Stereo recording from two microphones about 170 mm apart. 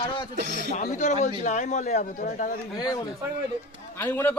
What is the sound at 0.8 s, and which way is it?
A man's voice, 45° left (ahead or behind).